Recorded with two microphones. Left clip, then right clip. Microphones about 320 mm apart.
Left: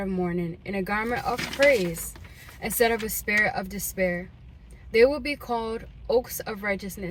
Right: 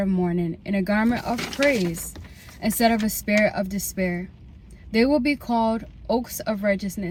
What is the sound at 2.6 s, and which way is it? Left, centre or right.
Speech, centre.